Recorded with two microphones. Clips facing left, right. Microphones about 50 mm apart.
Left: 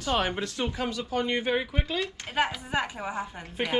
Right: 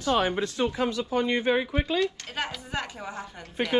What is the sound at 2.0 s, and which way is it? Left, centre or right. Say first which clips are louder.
Speech: left 1 dB; centre.